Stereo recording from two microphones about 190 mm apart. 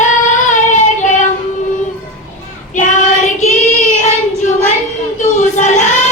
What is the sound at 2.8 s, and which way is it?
Child singing, 40° left (ahead or behind).